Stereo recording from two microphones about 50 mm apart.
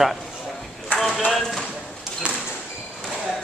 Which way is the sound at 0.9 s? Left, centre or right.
Centre.